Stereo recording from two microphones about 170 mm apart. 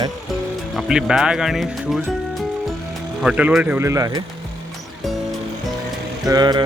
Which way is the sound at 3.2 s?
5° right (ahead or behind).